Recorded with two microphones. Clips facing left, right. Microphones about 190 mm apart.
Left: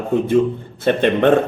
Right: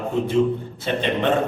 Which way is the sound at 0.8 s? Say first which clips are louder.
Left 7 dB; 55° left (ahead or behind).